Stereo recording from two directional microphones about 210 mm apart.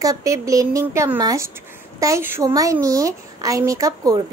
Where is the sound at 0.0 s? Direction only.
15° right (ahead or behind).